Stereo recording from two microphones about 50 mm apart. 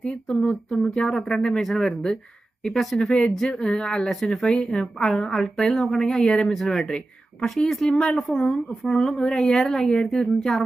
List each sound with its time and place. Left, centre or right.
0.0 s speech: centre
3.0 s speech: centre
3.3 s speech: centre
4.1 s speech: centre
4.6 s a woman's voice: centre
5.3 s speech: centre
6.5 s speech: centre